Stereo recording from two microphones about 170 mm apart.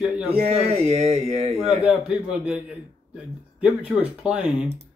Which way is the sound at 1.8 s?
5° right (ahead or behind).